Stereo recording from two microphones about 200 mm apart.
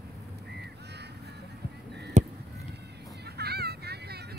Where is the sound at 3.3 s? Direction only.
50° right (ahead or behind).